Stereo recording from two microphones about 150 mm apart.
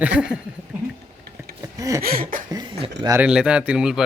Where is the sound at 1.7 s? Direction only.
20° right (ahead or behind).